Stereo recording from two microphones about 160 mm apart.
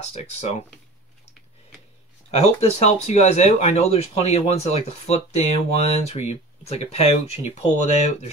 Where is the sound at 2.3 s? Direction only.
40° left (ahead or behind).